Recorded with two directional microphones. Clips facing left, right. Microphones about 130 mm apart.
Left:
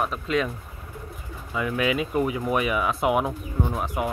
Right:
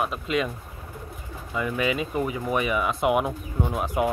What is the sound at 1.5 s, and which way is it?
Speech, centre (ahead or behind).